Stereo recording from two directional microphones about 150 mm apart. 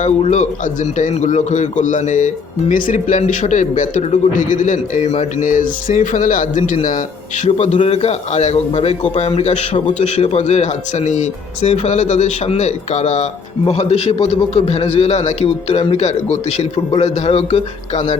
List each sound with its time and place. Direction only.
0.0 s a man's voice: 50° left (ahead or behind)
7.4 s a man's voice: 50° left (ahead or behind)